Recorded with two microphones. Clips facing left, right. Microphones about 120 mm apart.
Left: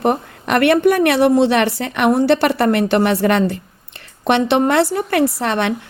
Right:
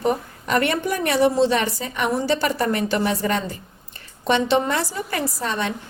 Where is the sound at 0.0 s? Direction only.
70° left (ahead or behind).